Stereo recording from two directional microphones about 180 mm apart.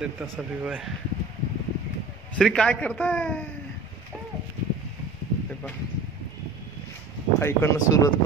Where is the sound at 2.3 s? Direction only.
5° left (ahead or behind).